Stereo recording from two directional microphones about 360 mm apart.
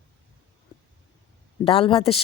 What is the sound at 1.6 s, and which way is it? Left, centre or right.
Speech, centre.